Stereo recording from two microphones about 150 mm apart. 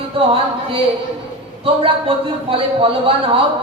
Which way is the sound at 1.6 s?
40° right (ahead or behind).